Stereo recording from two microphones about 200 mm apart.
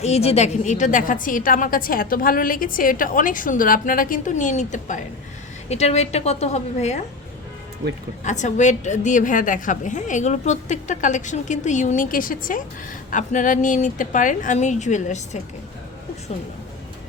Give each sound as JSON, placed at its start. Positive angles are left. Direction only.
{"t": 0.0, "sound": "a woman's voice", "side_deg": 30}
{"t": 8.2, "sound": "a woman's voice", "side_deg": 35}